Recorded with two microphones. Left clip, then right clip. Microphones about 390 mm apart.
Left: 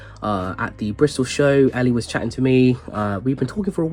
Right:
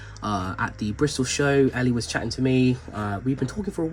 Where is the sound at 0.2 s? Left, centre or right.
Centre.